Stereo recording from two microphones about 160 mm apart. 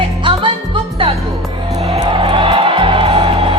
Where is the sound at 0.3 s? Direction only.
30° right (ahead or behind).